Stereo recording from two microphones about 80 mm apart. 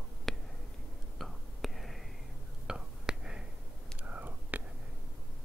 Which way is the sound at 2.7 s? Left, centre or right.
Centre.